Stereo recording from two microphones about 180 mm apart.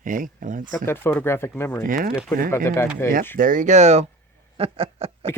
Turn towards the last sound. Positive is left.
turn(degrees=-35)  # may be behind; listen again after turning